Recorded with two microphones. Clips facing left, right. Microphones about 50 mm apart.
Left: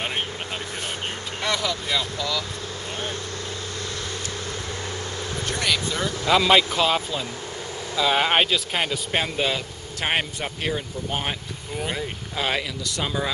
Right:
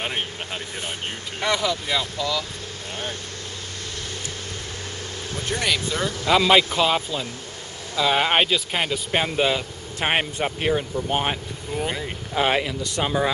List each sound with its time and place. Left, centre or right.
1.4 s speech: centre
5.5 s speech: centre
12.4 s speech: right